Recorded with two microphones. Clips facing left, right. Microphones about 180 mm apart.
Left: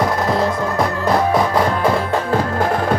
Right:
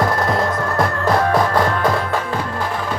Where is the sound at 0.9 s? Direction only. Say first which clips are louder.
Even; 15° left (ahead or behind).